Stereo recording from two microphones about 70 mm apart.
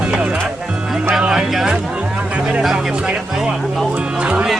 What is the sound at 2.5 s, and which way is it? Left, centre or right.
Speech, centre.